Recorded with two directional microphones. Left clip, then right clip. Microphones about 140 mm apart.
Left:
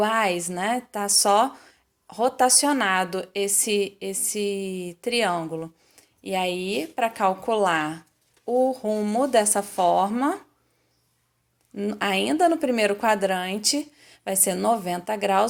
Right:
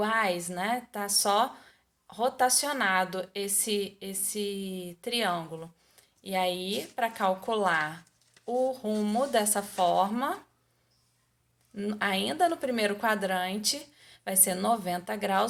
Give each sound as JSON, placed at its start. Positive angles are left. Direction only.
{"t": 0.0, "sound": "speech", "side_deg": 50}
{"t": 11.7, "sound": "speech", "side_deg": 40}